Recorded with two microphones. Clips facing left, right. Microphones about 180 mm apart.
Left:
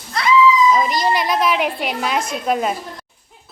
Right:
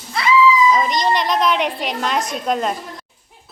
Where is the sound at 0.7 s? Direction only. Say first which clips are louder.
Even; 5° left (ahead or behind).